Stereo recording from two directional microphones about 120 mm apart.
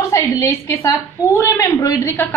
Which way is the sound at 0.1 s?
25° left (ahead or behind).